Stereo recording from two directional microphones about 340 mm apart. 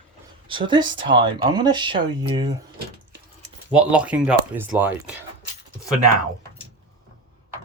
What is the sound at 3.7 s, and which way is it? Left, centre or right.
Speech, centre.